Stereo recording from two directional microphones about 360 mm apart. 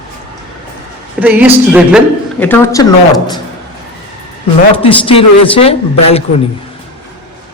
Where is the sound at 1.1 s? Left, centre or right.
Centre.